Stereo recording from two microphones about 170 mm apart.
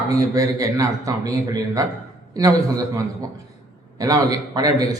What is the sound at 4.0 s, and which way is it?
Speech, 20° right (ahead or behind).